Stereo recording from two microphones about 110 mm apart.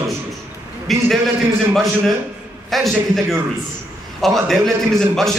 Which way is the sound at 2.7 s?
Centre (ahead or behind).